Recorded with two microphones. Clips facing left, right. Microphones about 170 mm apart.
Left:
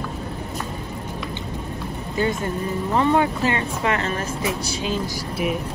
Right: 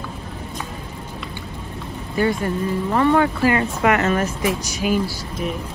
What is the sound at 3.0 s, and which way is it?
Speech, 20° left (ahead or behind).